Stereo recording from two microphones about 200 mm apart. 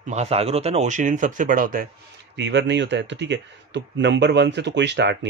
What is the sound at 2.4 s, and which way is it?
Speech, 60° right (ahead or behind).